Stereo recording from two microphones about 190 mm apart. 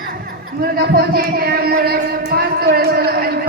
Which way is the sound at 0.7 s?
55° right (ahead or behind).